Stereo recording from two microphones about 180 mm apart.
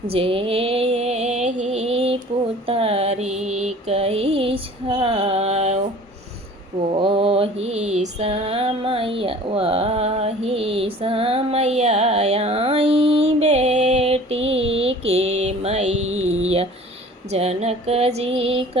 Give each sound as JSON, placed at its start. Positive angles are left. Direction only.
{"t": 0.1, "sound": "music", "side_deg": -30}
{"t": 2.6, "sound": "mantra", "side_deg": -30}
{"t": 6.9, "sound": "music", "side_deg": -30}
{"t": 16.1, "sound": "a sound", "side_deg": -35}